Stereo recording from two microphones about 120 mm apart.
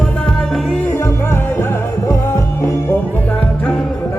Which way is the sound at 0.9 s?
20° left (ahead or behind).